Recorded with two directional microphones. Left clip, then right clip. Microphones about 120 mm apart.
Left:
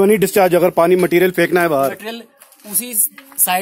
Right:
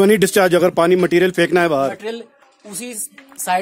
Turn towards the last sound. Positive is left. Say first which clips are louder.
# even
turn(degrees=20)  # may be behind; listen again after turning